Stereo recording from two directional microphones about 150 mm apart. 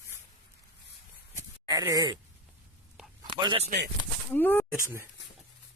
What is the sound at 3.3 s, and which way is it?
Speech, 30° right (ahead or behind).